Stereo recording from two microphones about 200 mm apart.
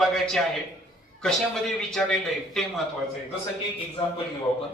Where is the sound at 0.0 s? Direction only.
Centre (ahead or behind).